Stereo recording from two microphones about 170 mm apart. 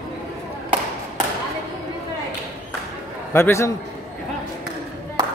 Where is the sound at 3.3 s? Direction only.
15° left (ahead or behind).